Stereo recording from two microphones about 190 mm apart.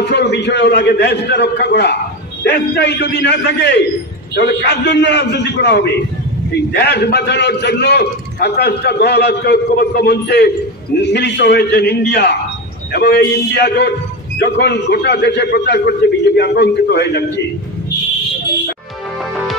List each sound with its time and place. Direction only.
0.1 s a man's voice: 65° left (ahead or behind)